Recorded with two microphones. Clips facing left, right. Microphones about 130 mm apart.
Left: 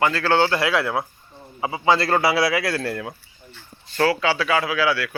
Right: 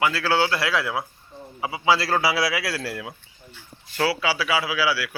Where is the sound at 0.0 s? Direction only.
10° right (ahead or behind).